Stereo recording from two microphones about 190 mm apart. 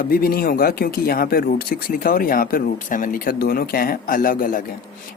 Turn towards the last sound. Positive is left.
turn(degrees=45)  # may be behind; listen again after turning